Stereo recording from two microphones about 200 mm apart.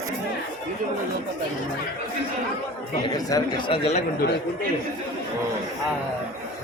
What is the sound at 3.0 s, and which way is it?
Speech, 20° left (ahead or behind).